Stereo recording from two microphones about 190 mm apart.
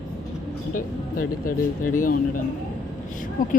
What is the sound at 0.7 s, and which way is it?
Speech, 45° left (ahead or behind).